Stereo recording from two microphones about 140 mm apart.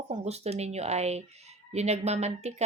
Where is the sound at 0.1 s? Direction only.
50° right (ahead or behind).